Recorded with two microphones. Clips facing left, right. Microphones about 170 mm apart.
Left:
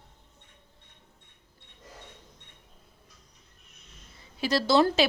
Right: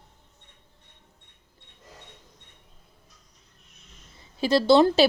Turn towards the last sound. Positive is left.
turn(degrees=-30)  # may be behind; listen again after turning